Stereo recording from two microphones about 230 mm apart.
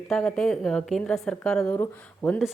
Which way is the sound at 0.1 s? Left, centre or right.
Centre.